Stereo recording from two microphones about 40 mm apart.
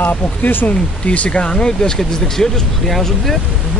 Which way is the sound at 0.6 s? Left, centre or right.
Left.